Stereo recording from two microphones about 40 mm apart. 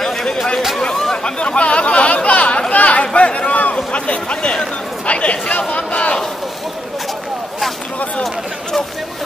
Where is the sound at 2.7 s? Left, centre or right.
Left.